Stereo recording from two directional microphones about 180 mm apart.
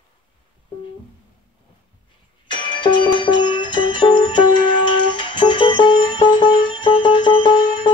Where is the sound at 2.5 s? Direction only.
25° left (ahead or behind).